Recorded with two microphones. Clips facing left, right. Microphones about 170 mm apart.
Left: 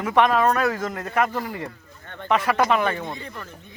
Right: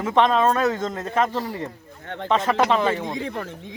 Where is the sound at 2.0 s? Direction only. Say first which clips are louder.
Right 6 dB; 80° right.